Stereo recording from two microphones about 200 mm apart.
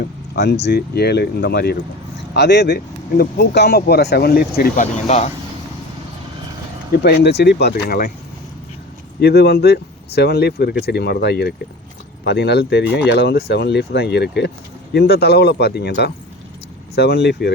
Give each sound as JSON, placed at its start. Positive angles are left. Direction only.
{"t": 0.3, "sound": "speech", "side_deg": 60}
{"t": 5.0, "sound": "speech", "side_deg": 35}
{"t": 6.9, "sound": "speech", "side_deg": 50}
{"t": 9.2, "sound": "speech", "side_deg": 55}